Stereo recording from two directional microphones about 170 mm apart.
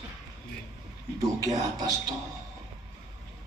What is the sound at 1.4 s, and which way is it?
Speech, 20° right (ahead or behind).